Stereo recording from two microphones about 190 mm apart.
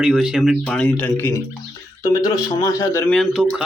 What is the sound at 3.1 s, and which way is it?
Speech, centre (ahead or behind).